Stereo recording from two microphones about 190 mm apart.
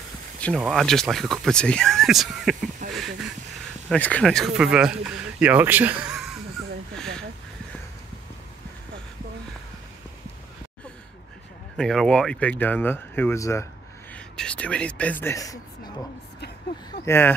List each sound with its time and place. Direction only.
0.4 s speech: centre (ahead or behind)
2.8 s speech: 40° right (ahead or behind)
3.9 s speech: 5° left (ahead or behind)
7.0 s a sound: 5° left (ahead or behind)
11.7 s speech: 5° left (ahead or behind)
17.0 s speech: 15° left (ahead or behind)